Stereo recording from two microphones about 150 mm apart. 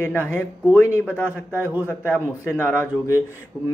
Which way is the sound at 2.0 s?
10° left (ahead or behind).